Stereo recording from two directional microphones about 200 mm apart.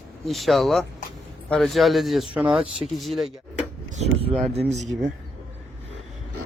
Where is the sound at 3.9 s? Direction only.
35° right (ahead or behind).